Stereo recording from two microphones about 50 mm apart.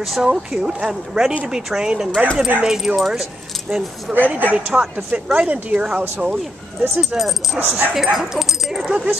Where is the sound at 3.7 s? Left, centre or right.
Right.